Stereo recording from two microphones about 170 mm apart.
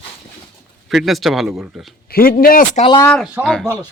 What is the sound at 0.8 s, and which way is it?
A man's voice, centre (ahead or behind).